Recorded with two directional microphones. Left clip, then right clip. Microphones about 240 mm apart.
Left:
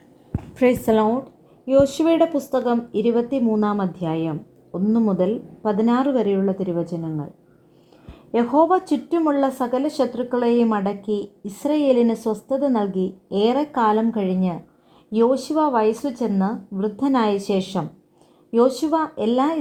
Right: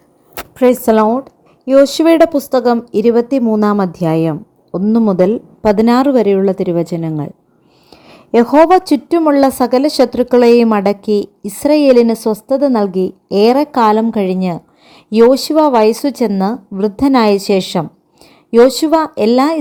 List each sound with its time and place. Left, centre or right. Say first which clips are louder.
0.5 s a woman's voice: right 8 dB; centre
8.4 s a woman's voice: right 9 dB; right